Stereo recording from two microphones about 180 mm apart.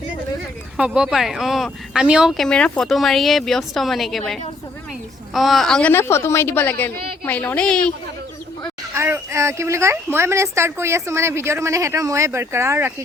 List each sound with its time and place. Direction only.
0.8 s speech: 5° right (ahead or behind)
5.3 s a woman's voice: centre (ahead or behind)
9.0 s a woman's voice: 15° right (ahead or behind)